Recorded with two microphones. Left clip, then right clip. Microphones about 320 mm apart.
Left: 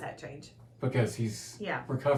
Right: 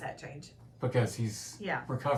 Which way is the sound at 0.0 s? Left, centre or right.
Centre.